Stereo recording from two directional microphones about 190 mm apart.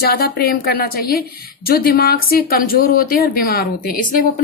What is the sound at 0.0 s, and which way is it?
Speech, 55° left (ahead or behind).